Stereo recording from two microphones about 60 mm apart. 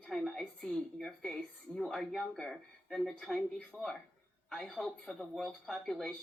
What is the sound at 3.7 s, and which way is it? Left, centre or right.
Speech, left.